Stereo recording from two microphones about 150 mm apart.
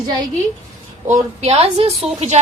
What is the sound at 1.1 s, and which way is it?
Speech, 45° right (ahead or behind).